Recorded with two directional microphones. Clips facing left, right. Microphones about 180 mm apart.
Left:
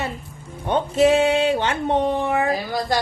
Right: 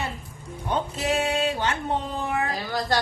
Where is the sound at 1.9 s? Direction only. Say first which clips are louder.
Left 8 dB; 75° left (ahead or behind).